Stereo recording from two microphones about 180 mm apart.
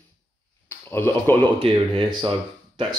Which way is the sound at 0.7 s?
10° left (ahead or behind).